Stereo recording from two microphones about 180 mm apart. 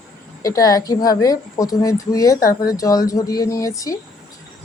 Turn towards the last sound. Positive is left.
turn(degrees=20)  # may be behind; listen again after turning